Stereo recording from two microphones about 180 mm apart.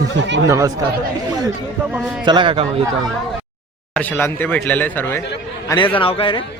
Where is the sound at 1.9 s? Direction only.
5° right (ahead or behind).